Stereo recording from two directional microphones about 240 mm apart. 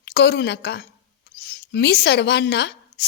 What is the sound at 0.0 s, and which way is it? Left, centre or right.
A woman's voice, left.